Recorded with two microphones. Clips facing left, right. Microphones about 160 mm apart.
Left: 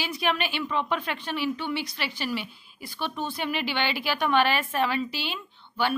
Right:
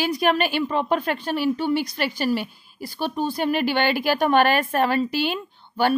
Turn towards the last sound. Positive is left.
turn(degrees=-50)  # may be behind; listen again after turning